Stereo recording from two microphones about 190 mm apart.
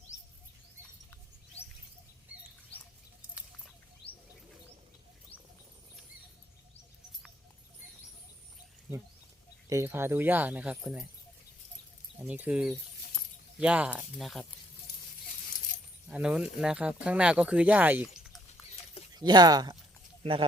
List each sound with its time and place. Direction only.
4.0 s bird: 30° left (ahead or behind)
8.9 s speech: 10° right (ahead or behind)
12.3 s speech: 5° right (ahead or behind)
16.0 s speech: 5° right (ahead or behind)
19.1 s speech: 20° right (ahead or behind)